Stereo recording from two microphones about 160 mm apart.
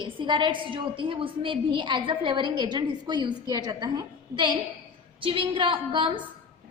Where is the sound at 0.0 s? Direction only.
30° right (ahead or behind).